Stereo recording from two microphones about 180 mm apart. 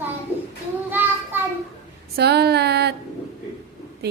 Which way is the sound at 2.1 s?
65° right (ahead or behind).